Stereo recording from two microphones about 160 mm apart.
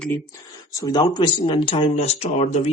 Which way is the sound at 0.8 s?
25° left (ahead or behind).